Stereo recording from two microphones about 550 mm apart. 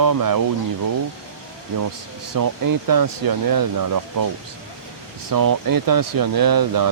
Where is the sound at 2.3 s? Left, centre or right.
Right.